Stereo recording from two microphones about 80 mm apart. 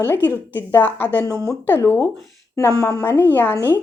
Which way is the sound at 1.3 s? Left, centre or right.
Right.